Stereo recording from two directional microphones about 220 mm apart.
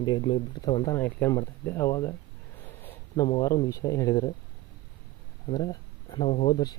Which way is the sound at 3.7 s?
15° left (ahead or behind).